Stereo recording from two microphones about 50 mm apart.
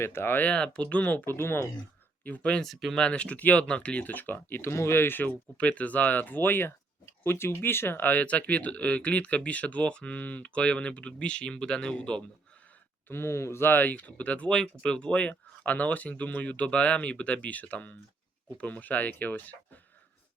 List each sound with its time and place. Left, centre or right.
0.0 s speech: left
0.5 s speech: left
1.3 s speech: left
2.2 s speech: left
2.6 s speech: centre
3.0 s speech: left
4.7 s speech: left
5.3 s speech: left
8.2 s speech: left
13.1 s speech: left
14.5 s speech: centre; by 19.8 s left